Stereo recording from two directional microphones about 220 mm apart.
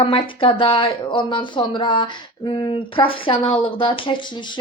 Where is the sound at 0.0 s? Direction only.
25° left (ahead or behind).